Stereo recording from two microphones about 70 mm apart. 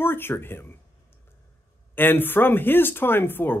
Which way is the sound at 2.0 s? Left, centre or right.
Left.